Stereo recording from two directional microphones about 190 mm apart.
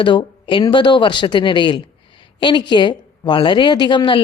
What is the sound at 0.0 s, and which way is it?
Speech, 25° left (ahead or behind).